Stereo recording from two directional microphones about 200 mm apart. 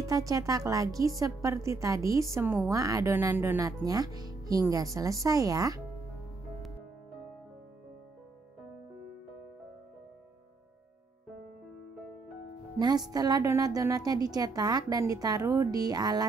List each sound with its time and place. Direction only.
0.0 s speech: 15° right (ahead or behind)
12.7 s a woman's voice: 20° right (ahead or behind)